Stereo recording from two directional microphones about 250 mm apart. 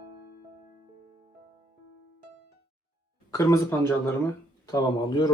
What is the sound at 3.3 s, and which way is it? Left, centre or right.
Speech, centre.